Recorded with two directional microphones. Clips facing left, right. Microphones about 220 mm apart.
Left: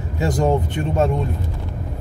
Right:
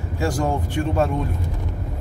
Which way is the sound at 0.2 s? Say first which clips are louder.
Left 4 dB; 20° left (ahead or behind).